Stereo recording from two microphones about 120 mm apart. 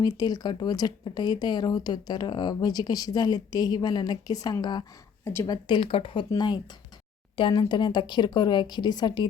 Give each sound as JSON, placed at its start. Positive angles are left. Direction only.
{"t": 0.0, "sound": "speech", "side_deg": 35}
{"t": 5.2, "sound": "speech", "side_deg": 20}
{"t": 5.5, "sound": "speech", "side_deg": 40}
{"t": 6.3, "sound": "speech", "side_deg": 35}